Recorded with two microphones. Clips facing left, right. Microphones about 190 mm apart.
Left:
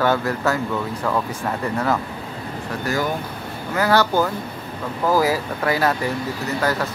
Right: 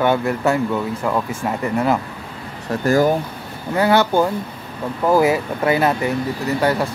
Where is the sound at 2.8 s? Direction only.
45° right (ahead or behind).